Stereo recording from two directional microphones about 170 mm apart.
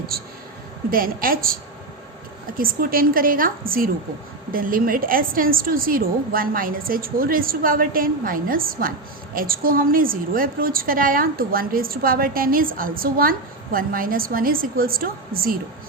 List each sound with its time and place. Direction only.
0.1 s a woman's voice: 65° right (ahead or behind)
2.6 s a woman's voice: 60° right (ahead or behind)